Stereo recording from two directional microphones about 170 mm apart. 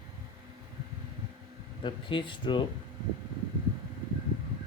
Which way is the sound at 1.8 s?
30° left (ahead or behind).